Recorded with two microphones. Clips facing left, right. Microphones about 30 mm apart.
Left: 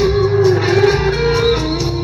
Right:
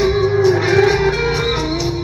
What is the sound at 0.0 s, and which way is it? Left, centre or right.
Music, centre.